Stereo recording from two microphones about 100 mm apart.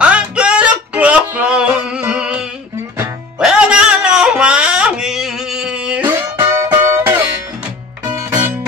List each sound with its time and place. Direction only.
0.0 s music: 10° right (ahead or behind)
6.0 s music: 25° right (ahead or behind)